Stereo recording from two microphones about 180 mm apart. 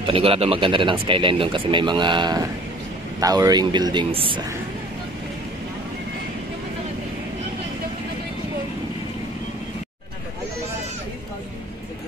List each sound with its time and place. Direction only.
0.0 s speech: 30° right (ahead or behind)